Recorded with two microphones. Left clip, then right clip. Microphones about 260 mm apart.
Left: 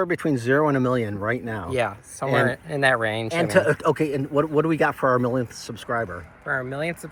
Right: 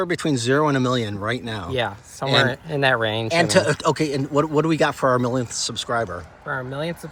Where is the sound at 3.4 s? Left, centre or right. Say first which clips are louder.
Right 1 dB; centre.